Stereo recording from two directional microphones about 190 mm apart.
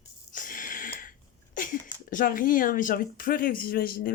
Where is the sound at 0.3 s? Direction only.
45° left (ahead or behind).